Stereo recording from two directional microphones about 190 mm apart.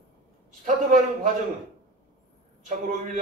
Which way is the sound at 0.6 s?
40° right (ahead or behind).